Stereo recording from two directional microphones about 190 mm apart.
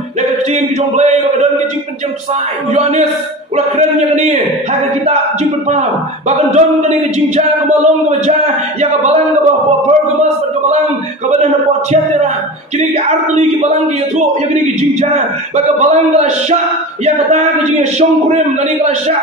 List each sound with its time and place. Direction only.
0.5 s speech: 35° right (ahead or behind)
2.7 s speech: 35° right (ahead or behind)
12.7 s speech: 35° right (ahead or behind)